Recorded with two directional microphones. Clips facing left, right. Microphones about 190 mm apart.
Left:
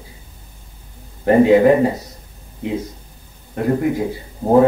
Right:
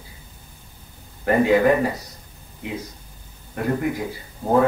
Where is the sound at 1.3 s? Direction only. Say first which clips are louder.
Left 6 dB; 25° left (ahead or behind).